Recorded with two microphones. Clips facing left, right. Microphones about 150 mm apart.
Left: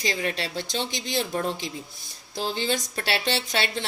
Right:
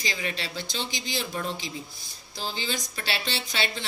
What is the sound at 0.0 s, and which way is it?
A woman's voice, 55° left (ahead or behind).